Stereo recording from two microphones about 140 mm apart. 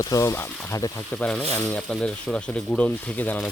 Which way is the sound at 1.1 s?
10° left (ahead or behind).